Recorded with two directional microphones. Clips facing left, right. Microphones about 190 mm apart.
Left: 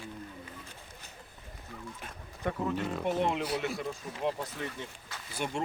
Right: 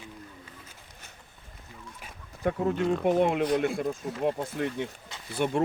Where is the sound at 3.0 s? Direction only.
55° right (ahead or behind).